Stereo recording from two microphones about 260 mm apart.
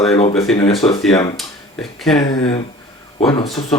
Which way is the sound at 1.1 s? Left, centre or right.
Centre.